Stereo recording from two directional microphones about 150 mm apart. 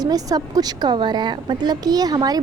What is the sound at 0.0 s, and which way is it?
A woman's voice, 25° right (ahead or behind).